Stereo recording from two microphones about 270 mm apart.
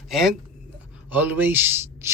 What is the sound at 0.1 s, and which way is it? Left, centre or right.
A man's voice, centre.